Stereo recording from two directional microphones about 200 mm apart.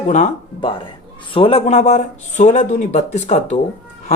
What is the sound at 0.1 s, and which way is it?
Speech, 35° left (ahead or behind).